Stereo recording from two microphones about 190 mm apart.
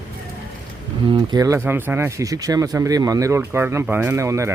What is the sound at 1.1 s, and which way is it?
Speech, 20° right (ahead or behind).